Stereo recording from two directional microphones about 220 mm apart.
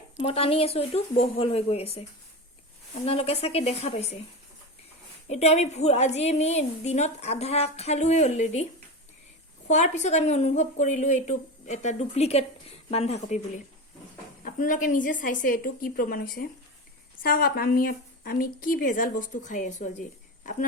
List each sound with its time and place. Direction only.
0.2 s a woman's voice: 25° left (ahead or behind)
5.3 s a woman's voice: 30° left (ahead or behind)
9.6 s a woman's voice: 30° left (ahead or behind)
14.4 s a woman's voice: 35° left (ahead or behind)